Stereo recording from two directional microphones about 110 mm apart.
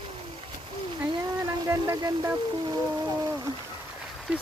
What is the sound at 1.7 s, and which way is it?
Speech, 25° right (ahead or behind).